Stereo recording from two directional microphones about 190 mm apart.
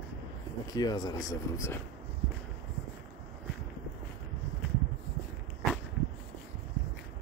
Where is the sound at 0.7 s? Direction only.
20° left (ahead or behind).